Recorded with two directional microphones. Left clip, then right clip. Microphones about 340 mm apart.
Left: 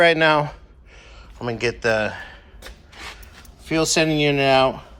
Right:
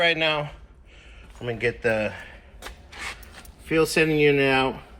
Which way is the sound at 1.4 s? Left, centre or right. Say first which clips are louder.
Left 2 dB; centre.